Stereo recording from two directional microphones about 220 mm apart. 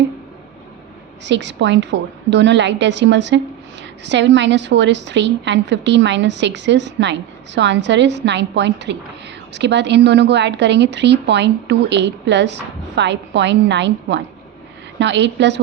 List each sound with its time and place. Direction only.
1.2 s a woman's voice: 55° right (ahead or behind)